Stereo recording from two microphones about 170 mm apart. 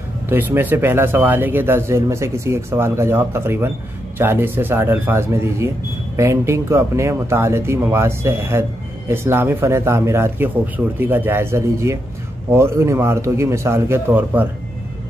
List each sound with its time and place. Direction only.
0.3 s speech: 10° right (ahead or behind)